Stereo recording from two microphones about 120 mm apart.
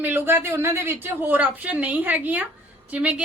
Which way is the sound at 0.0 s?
15° right (ahead or behind).